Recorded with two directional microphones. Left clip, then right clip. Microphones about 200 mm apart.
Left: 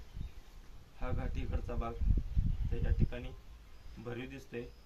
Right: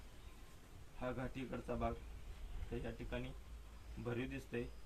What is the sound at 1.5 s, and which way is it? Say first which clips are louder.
Speech: even; 5° left (ahead or behind).